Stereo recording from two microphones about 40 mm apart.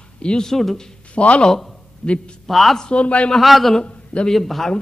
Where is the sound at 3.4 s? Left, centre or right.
Centre.